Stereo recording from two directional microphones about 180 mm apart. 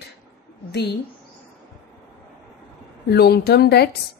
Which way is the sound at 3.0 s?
60° left (ahead or behind).